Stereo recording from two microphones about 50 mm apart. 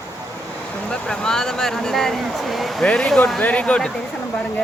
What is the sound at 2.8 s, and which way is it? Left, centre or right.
Speech, centre.